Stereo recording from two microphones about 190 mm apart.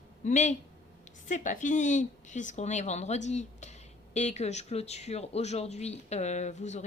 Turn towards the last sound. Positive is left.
turn(degrees=35)  # may be behind; listen again after turning